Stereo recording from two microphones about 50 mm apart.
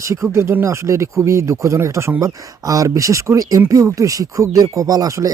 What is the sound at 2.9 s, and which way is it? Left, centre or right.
Speech, right.